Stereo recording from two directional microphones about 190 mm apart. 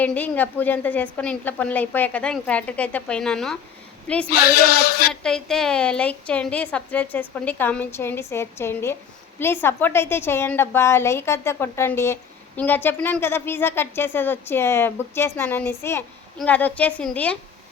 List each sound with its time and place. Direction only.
0.0 s a woman's voice: 10° left (ahead or behind)
4.3 s a sound: 55° left (ahead or behind)
5.2 s a woman's voice: 5° left (ahead or behind)